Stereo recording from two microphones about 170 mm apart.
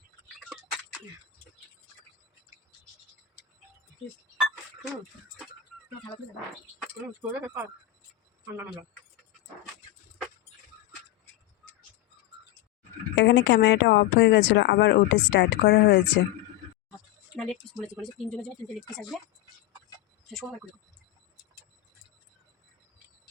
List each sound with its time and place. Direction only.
0.3 s a sound: 5° right (ahead or behind)
7.2 s speech: 10° right (ahead or behind)
13.1 s speech: 90° left
17.3 s speech: 5° left (ahead or behind)